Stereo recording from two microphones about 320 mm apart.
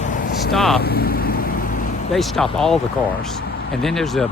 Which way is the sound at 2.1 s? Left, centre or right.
Centre.